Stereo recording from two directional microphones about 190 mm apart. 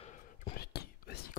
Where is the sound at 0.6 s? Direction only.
55° left (ahead or behind).